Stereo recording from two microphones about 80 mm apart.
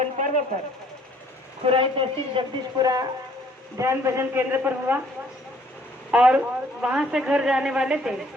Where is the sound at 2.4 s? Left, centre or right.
Right.